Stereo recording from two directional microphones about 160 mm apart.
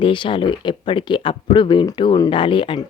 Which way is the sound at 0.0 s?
30° left (ahead or behind).